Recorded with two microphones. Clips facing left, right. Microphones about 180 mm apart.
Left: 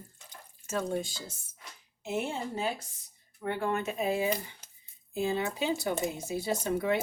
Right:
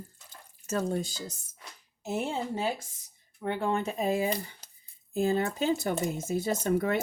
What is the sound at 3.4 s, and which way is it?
Speech, 25° right (ahead or behind).